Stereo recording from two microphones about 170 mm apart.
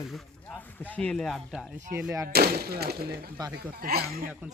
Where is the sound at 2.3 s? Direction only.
65° right (ahead or behind).